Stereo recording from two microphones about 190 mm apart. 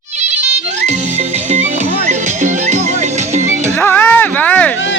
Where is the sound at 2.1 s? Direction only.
35° right (ahead or behind).